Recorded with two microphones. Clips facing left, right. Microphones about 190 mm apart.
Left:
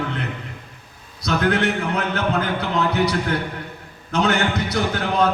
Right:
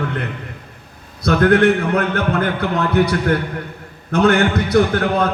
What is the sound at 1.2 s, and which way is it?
A man's voice, 55° right (ahead or behind).